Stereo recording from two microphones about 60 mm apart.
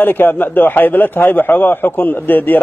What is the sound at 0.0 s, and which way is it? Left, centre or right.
A man's voice, left.